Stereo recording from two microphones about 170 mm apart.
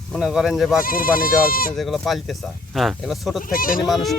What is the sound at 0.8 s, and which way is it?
Speech, 55° left (ahead or behind).